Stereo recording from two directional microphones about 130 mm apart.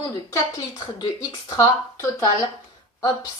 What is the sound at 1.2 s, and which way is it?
A woman's voice, 25° left (ahead or behind).